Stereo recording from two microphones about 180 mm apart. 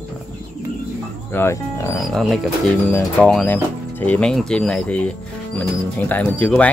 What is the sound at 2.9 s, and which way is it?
Speech, 15° left (ahead or behind).